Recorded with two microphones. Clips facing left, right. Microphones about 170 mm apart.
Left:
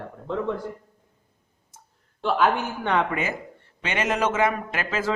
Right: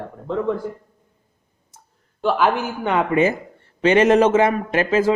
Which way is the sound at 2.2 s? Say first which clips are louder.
Right 3 dB; 5° right (ahead or behind).